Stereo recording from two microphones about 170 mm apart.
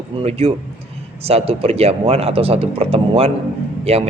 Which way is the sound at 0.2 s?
35° right (ahead or behind).